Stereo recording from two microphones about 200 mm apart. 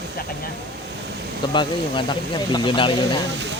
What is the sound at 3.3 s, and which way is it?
Speech, 60° right (ahead or behind).